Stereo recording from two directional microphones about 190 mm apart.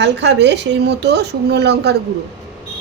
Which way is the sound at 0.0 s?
65° right (ahead or behind).